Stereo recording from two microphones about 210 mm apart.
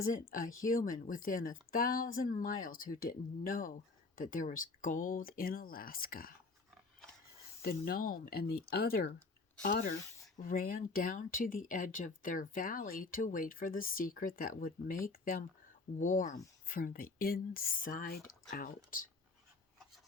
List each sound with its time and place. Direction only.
0.0 s speech: 40° left (ahead or behind)
7.6 s speech: 45° left (ahead or behind)